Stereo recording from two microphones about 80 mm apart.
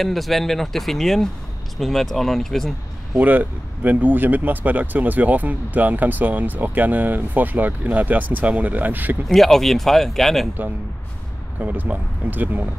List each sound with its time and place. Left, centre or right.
0.0 s speech: centre
3.2 s speech: right
9.3 s speech: centre
11.6 s speech: right